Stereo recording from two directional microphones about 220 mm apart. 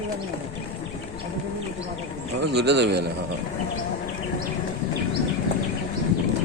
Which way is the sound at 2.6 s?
50° right (ahead or behind).